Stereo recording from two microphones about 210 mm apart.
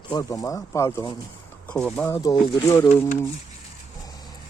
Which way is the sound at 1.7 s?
5° left (ahead or behind).